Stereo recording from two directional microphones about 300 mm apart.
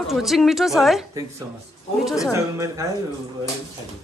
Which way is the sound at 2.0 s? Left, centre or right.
Centre.